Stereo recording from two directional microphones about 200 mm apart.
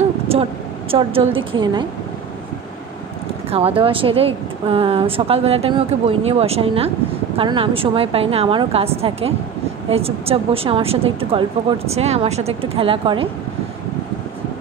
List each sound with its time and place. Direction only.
0.3 s speech: 30° right (ahead or behind)
3.4 s speech: 30° right (ahead or behind)